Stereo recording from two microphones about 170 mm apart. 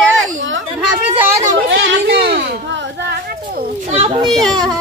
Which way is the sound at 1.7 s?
75° right (ahead or behind).